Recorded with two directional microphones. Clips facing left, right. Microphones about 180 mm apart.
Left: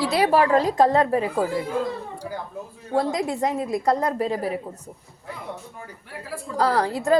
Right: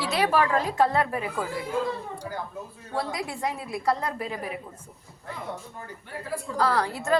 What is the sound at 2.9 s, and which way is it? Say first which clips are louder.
A woman's voice: left 8 dB; 45° left (ahead or behind).